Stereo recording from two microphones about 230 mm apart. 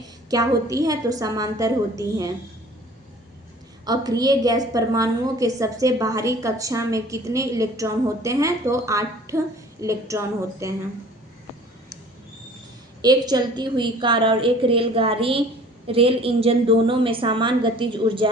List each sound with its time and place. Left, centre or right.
0.3 s a woman's voice: centre
3.8 s a woman's voice: centre
13.0 s a woman's voice: centre